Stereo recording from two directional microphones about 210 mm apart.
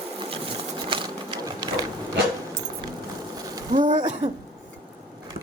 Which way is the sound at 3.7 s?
35° right (ahead or behind).